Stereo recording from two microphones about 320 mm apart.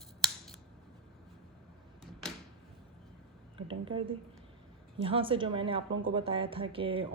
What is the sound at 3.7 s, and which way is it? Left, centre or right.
Speech, centre.